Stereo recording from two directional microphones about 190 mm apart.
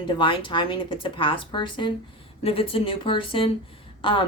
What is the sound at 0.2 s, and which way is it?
A woman's voice, 25° left (ahead or behind).